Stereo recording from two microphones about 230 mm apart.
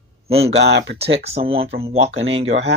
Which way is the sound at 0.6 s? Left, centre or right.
Right.